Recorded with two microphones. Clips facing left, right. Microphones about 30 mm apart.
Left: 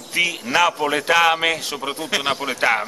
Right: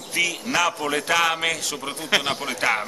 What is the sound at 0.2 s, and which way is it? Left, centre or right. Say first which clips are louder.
A man's voice: left 4 dB; centre.